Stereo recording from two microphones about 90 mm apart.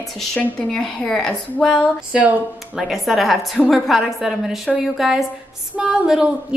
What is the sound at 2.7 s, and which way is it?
A woman's voice, centre (ahead or behind).